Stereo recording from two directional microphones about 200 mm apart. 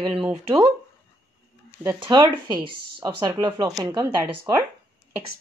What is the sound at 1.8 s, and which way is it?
Speech, 15° right (ahead or behind).